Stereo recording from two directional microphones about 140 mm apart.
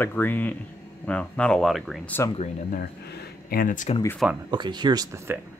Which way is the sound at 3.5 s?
75° left (ahead or behind).